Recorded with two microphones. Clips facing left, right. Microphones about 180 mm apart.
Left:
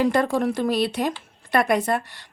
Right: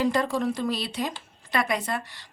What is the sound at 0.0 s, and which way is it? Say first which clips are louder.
A woman's voice: left 4 dB; 55° left (ahead or behind).